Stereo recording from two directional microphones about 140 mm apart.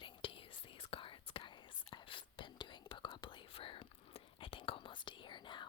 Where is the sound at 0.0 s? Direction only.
40° left (ahead or behind).